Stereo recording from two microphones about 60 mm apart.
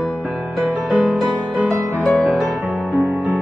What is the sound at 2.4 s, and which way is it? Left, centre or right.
Music, right.